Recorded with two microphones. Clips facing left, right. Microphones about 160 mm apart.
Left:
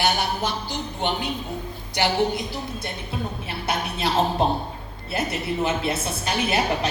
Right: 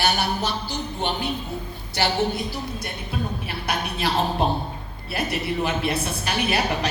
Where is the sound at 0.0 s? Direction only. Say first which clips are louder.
Even; 20° left (ahead or behind).